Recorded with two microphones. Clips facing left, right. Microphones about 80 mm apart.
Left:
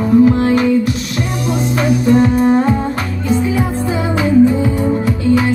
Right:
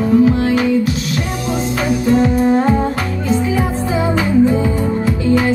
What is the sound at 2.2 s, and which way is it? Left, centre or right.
Music, left.